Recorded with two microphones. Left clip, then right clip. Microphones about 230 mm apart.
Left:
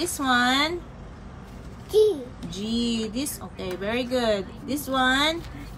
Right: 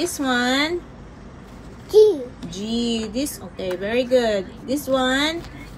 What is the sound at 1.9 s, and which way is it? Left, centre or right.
Speech, centre.